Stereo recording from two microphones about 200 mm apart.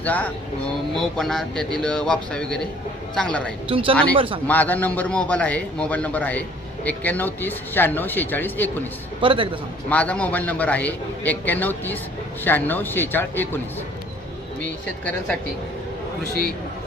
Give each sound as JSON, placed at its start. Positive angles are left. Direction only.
{"t": 0.0, "sound": "speech", "side_deg": 10}
{"t": 3.7, "sound": "a man's voice", "side_deg": -25}
{"t": 4.4, "sound": "speech", "side_deg": 10}
{"t": 9.2, "sound": "a man's voice", "side_deg": -25}
{"t": 9.9, "sound": "speech", "side_deg": 5}
{"t": 16.2, "sound": "a man's voice", "side_deg": -50}